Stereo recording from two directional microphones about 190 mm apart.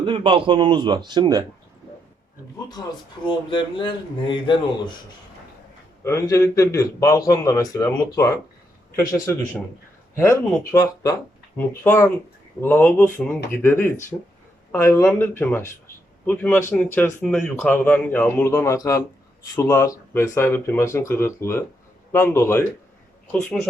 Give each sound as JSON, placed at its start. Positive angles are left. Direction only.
{"t": 0.0, "sound": "a man's voice", "side_deg": -30}
{"t": 2.6, "sound": "speech", "side_deg": 20}
{"t": 6.0, "sound": "a man's voice", "side_deg": 15}
{"t": 10.2, "sound": "a man's voice", "side_deg": 15}